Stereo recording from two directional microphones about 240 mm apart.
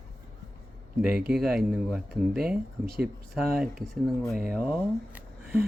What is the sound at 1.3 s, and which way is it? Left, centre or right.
Speech, centre.